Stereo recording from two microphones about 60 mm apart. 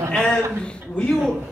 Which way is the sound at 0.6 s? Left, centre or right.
Centre.